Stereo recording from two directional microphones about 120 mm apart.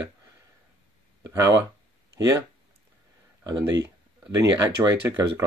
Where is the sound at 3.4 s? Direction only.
25° right (ahead or behind).